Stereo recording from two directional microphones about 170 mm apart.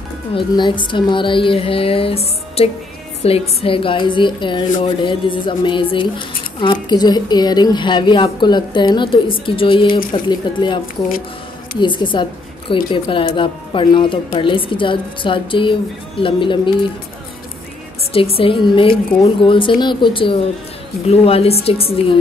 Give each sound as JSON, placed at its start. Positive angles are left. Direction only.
{"t": 0.3, "sound": "speech", "side_deg": 30}
{"t": 11.8, "sound": "speech", "side_deg": 30}
{"t": 18.1, "sound": "speech", "side_deg": 35}